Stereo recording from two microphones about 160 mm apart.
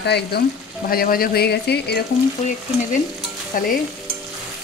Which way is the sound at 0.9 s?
65° left (ahead or behind).